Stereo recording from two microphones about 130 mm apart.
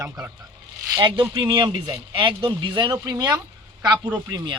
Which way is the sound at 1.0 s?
30° right (ahead or behind).